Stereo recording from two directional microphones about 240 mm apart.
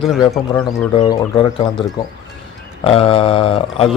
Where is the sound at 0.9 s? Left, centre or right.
Centre.